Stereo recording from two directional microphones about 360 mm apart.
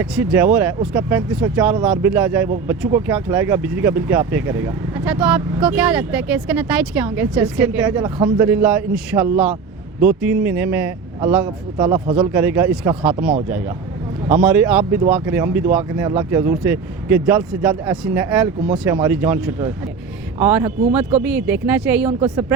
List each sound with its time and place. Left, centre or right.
0.0 s speech: centre